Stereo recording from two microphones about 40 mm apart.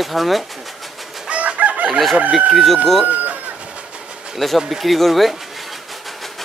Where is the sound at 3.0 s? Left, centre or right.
Right.